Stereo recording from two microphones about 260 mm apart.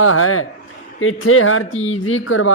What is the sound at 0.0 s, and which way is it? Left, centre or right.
A woman's voice, left.